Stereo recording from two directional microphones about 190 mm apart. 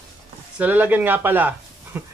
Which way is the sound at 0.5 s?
10° right (ahead or behind).